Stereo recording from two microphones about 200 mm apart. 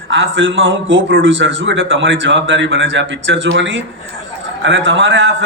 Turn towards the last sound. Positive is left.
turn(degrees=-70)  # may be behind; listen again after turning